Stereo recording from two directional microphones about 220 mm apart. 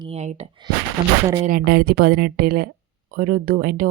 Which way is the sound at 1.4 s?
40° right (ahead or behind).